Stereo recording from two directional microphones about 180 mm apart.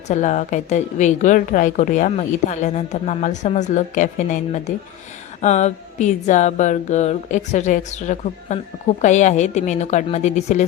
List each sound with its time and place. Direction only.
0.1 s a woman's voice: 40° left (ahead or behind)